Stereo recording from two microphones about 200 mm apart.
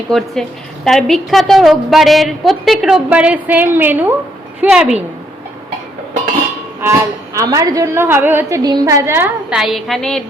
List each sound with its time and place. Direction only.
0.1 s a woman's voice: centre (ahead or behind)
7.3 s a woman's voice: 15° right (ahead or behind); by 10.2 s 5° left (ahead or behind)